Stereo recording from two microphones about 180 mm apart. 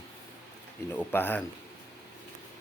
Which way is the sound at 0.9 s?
10° left (ahead or behind).